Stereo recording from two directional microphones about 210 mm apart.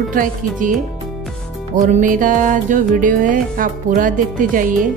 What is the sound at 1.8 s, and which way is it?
Music, 35° right (ahead or behind).